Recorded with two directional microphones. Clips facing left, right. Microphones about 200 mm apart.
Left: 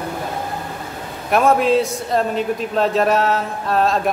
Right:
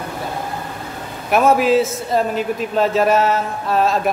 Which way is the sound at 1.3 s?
5° right (ahead or behind).